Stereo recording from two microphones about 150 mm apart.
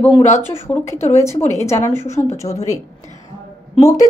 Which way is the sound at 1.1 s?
20° left (ahead or behind).